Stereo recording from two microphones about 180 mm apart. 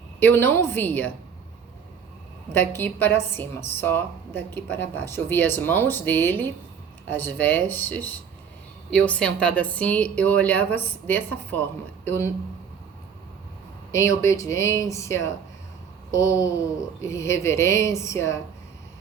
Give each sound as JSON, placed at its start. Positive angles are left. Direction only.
{"t": 0.2, "sound": "a woman's voice", "side_deg": 10}
{"t": 2.5, "sound": "a woman's voice", "side_deg": 10}
{"t": 13.9, "sound": "a woman's voice", "side_deg": 15}